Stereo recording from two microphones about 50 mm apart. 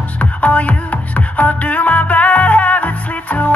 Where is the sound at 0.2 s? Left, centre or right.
Left.